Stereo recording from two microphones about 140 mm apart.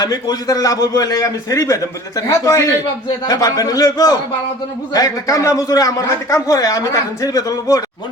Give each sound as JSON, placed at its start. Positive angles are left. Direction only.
{"t": 0.0, "sound": "a man's voice", "side_deg": 30}